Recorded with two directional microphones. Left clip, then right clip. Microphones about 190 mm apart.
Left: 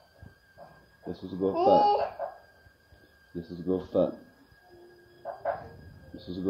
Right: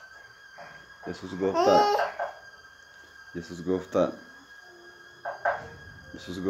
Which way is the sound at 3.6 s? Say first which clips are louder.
Right 1 dB; 30° right (ahead or behind).